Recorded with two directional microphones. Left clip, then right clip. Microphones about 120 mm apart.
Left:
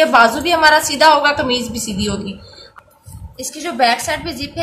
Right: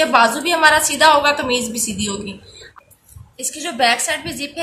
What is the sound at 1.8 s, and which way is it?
Speech, 40° left (ahead or behind).